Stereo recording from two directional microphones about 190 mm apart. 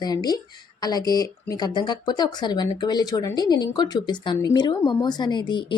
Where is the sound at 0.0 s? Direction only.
20° left (ahead or behind).